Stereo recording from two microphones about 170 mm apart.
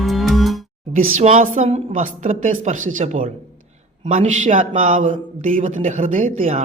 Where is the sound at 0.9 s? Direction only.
45° right (ahead or behind).